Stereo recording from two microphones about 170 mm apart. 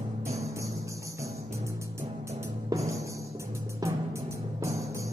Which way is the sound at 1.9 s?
15° right (ahead or behind).